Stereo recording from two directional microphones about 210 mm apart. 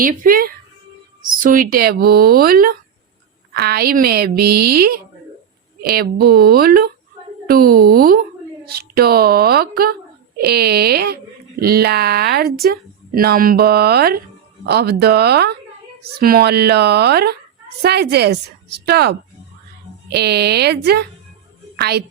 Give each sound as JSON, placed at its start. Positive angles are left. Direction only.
{"t": 0.0, "sound": "speech", "side_deg": -40}
{"t": 12.4, "sound": "speech", "side_deg": 0}
{"t": 12.7, "sound": "a woman's voice", "side_deg": -45}